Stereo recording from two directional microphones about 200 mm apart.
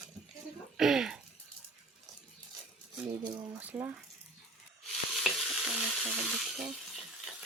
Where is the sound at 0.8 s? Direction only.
Centre (ahead or behind).